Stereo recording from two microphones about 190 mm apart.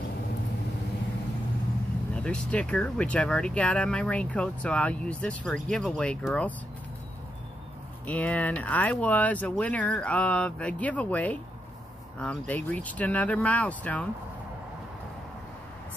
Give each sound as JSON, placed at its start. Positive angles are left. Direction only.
{"t": 2.2, "sound": "speech", "side_deg": 5}
{"t": 8.1, "sound": "speech", "side_deg": 10}